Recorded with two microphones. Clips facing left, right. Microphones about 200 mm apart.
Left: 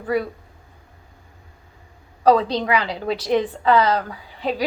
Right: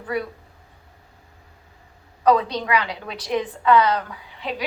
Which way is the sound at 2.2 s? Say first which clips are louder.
Left 2 dB; 35° left (ahead or behind).